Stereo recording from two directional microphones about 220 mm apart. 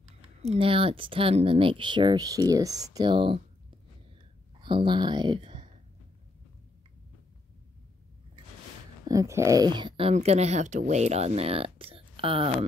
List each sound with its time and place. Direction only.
0.2 s speech: 30° right (ahead or behind)
4.6 s speech: 20° right (ahead or behind)
9.1 s speech: 15° right (ahead or behind)